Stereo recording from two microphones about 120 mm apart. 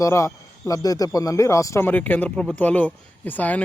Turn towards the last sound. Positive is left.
turn(degrees=15)  # may be behind; listen again after turning